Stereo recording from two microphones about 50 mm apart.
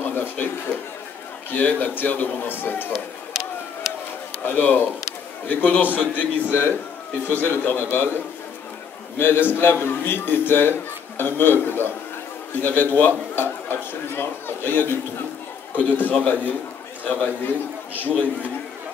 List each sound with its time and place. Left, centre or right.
0.0 s a sound: left
1.5 s a man's voice: left
2.9 s a sound: centre
4.5 s a man's voice: left
7.4 s a man's voice: left
7.7 s a man's voice: left
9.2 s a man's voice: left
15.7 s a man's voice: left